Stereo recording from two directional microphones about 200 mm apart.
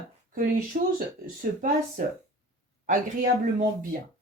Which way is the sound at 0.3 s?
45° right (ahead or behind).